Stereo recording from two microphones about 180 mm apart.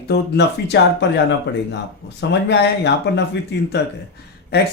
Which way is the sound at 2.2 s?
70° left (ahead or behind).